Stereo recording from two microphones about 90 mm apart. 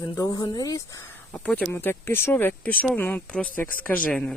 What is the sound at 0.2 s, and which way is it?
Speech, 40° left (ahead or behind).